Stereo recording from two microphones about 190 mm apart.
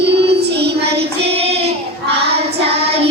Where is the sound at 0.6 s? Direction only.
60° right (ahead or behind).